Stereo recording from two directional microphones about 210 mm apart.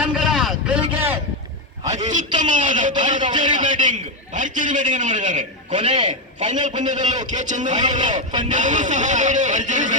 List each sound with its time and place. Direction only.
0.0 s vehicle: centre (ahead or behind)
1.9 s a sound: 35° right (ahead or behind)
2.4 s a man's voice: 35° right (ahead or behind)
3.2 s speech: 25° right (ahead or behind)
3.6 s a man's voice: 35° right (ahead or behind)
5.7 s speech: 25° right (ahead or behind)
6.4 s a man's voice: 35° right (ahead or behind)
7.8 s speech: 20° right (ahead or behind)
8.4 s a man's voice: 35° right (ahead or behind)